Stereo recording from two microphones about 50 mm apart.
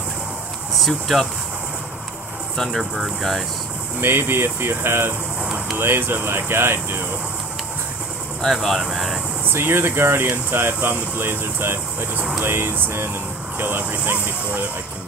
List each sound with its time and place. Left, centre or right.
0.7 s speech: centre
2.5 s speech: centre
2.8 s speech: centre
4.0 s speech: right
5.4 s a sound: centre
5.8 s speech: right
8.5 s speech: centre
9.5 s speech: right
10.3 s speech: right
13.6 s speech: right